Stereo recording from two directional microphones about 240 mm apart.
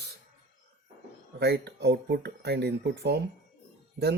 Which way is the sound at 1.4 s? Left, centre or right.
Right.